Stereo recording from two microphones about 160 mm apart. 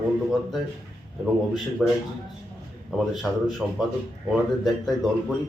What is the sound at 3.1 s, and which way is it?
Speech, centre (ahead or behind).